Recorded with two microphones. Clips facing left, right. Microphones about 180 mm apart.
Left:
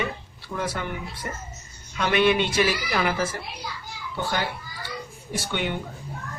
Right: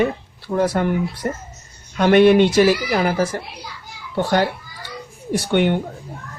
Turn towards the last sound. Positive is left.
turn(degrees=-60)  # may be behind; listen again after turning